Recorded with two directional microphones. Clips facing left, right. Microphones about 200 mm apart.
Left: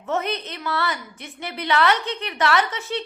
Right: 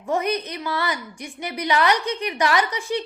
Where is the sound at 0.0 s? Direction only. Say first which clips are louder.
Right 2 dB; 15° right (ahead or behind).